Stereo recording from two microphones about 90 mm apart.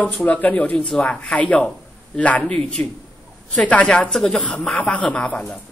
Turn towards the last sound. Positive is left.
turn(degrees=15)  # may be behind; listen again after turning